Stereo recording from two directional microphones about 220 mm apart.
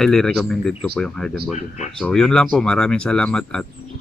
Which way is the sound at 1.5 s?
30° left (ahead or behind).